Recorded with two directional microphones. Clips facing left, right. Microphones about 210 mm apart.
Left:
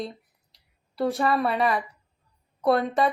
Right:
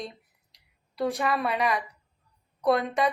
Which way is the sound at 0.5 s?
Centre (ahead or behind).